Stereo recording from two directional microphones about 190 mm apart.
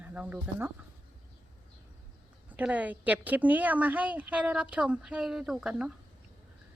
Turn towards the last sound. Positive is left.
turn(degrees=-5)  # may be behind; listen again after turning